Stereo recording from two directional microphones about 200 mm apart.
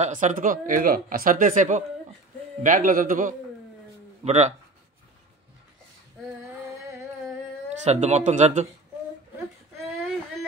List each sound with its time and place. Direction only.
0.0 s speech: 40° right (ahead or behind)
7.8 s speech: 35° right (ahead or behind)